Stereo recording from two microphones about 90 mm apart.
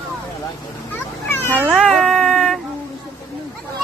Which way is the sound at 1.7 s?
Centre (ahead or behind).